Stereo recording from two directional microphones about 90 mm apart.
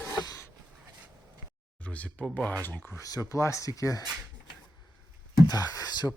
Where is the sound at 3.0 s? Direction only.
40° left (ahead or behind).